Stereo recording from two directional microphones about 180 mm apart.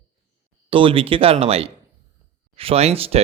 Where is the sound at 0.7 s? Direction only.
30° right (ahead or behind).